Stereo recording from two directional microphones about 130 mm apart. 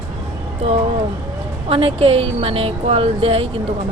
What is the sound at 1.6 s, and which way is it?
A woman's voice, 45° right (ahead or behind).